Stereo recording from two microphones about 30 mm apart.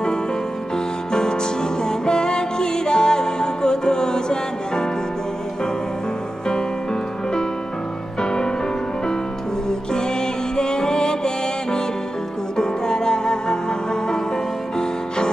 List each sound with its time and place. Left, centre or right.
1.1 s music: left
8.2 s music: left
9.7 s music: left